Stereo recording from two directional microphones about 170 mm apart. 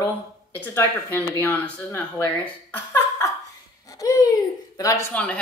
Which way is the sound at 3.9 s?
20° left (ahead or behind).